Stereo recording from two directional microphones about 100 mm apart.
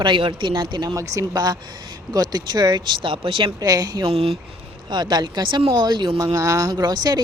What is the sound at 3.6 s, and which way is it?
Speech, 40° right (ahead or behind).